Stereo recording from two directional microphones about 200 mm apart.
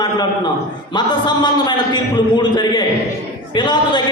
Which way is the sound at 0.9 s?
20° left (ahead or behind).